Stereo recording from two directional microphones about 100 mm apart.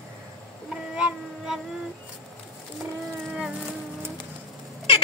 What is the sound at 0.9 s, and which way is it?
Child singing, 10° right (ahead or behind).